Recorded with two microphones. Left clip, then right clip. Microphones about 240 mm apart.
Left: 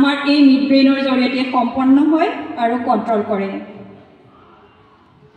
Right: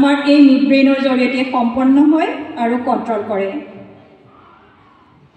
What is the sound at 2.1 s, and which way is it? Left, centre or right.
A man's voice, right.